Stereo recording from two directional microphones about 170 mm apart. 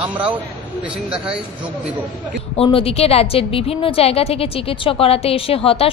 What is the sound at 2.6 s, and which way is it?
A woman's voice, 35° left (ahead or behind).